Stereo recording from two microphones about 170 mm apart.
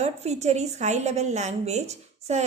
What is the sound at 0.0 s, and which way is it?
A woman's voice, 40° right (ahead or behind).